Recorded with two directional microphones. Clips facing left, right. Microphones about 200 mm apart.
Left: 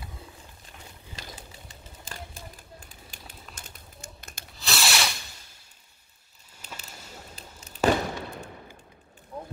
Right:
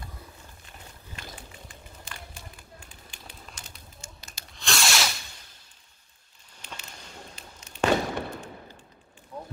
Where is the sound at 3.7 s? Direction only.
55° left (ahead or behind).